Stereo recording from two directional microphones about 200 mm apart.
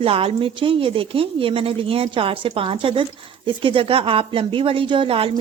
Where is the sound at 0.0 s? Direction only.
30° right (ahead or behind).